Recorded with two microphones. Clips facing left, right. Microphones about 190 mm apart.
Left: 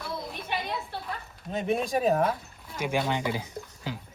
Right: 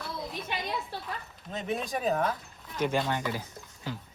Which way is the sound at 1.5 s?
55° left (ahead or behind).